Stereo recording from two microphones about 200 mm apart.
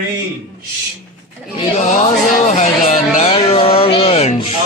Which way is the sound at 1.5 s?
35° left (ahead or behind).